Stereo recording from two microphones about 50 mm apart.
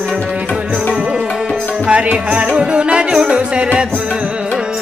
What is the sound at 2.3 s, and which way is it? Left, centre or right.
Music, right.